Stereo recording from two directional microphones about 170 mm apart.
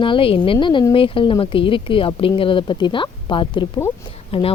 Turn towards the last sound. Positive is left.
turn(degrees=35)  # may be behind; listen again after turning